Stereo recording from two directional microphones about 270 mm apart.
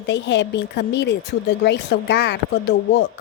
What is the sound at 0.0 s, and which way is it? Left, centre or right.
A woman's voice, left.